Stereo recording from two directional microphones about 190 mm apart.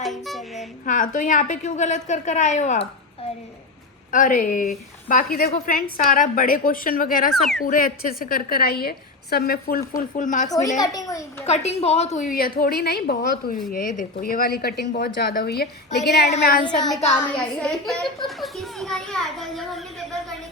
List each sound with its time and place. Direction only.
0.0 s music: centre (ahead or behind)
0.9 s a woman's voice: 45° left (ahead or behind)
4.1 s a woman's voice: 45° left (ahead or behind)
7.3 s a child's voice: centre (ahead or behind)
7.6 s a woman's voice: 45° left (ahead or behind)
10.8 s a child's voice: 20° left (ahead or behind)
11.4 s a woman's voice: 35° left (ahead or behind); by 16.3 s 60° left (ahead or behind)
16.7 s a child's voice: centre (ahead or behind)